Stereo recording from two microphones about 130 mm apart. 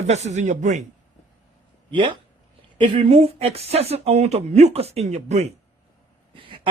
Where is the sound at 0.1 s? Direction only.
60° right (ahead or behind).